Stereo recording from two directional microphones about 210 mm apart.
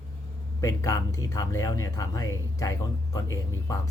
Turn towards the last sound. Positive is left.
turn(degrees=15)  # may be behind; listen again after turning